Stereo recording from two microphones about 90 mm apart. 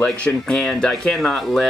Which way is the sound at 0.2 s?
5° left (ahead or behind).